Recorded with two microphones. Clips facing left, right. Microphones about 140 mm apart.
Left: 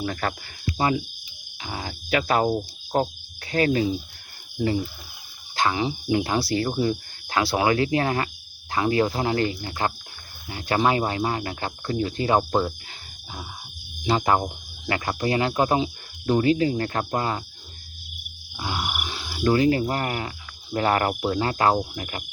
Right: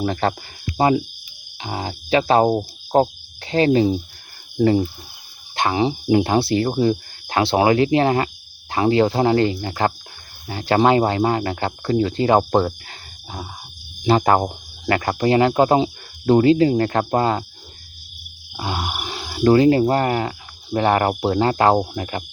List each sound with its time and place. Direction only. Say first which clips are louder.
0.0 s speech: right 7 dB; 30° right (ahead or behind)
1.6 s cricket: right 6 dB; 25° right (ahead or behind)
4.6 s speech: right 8 dB; 40° right (ahead or behind)
5.5 s speech: right 4 dB; 30° right (ahead or behind)
6.7 s speech: right 5 dB; 40° right (ahead or behind)
7.3 s speech: right 5 dB; 25° right (ahead or behind); by 13.5 s 45° right (ahead or behind)
14.1 s speech: right 5 dB; 55° right (ahead or behind); by 17.4 s 35° right (ahead or behind)
18.5 s a sound: right 4 dB; 35° right (ahead or behind)
20.7 s speech: right 5 dB; 30° right (ahead or behind)